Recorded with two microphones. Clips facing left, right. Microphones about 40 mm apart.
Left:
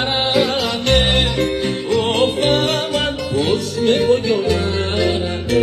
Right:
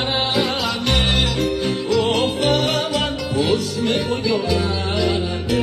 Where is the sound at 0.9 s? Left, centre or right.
Centre.